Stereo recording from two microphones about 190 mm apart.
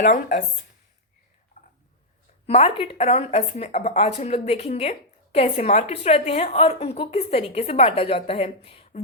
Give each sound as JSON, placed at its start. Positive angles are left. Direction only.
{"t": 0.0, "sound": "speech", "side_deg": 40}
{"t": 1.6, "sound": "a sound", "side_deg": 35}
{"t": 2.5, "sound": "speech", "side_deg": 30}